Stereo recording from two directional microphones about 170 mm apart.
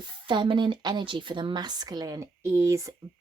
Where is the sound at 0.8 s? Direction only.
25° right (ahead or behind).